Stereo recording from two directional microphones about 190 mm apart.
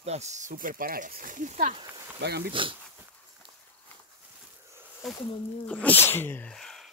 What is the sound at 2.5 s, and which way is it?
Speech, 25° right (ahead or behind).